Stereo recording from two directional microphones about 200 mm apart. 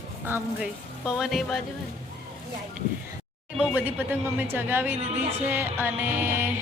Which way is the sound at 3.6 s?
10° right (ahead or behind).